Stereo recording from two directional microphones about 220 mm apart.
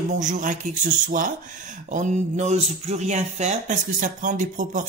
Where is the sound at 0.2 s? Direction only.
35° right (ahead or behind).